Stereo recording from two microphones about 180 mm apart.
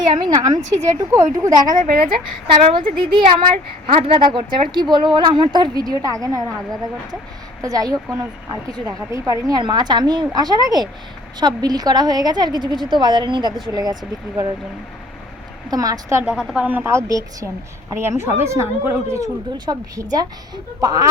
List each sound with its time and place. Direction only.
0.0 s a woman's voice: 25° right (ahead or behind)
1.8 s a woman's voice: 50° right (ahead or behind)
2.6 s speech: 25° right (ahead or behind)
7.6 s speech: 20° right (ahead or behind)
15.7 s a woman's voice: 20° right (ahead or behind)
16.3 s a woman's voice: 5° right (ahead or behind); by 21.1 s 20° right (ahead or behind)